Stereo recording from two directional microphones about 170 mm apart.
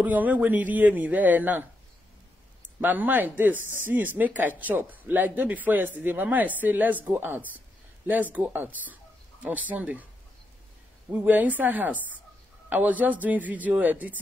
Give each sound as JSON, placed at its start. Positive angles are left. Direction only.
{"t": 0.0, "sound": "speech", "side_deg": -10}
{"t": 2.8, "sound": "speech", "side_deg": -10}
{"t": 11.1, "sound": "speech", "side_deg": -10}